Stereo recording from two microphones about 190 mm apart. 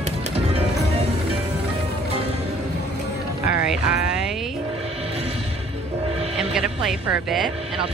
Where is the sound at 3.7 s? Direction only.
Centre (ahead or behind).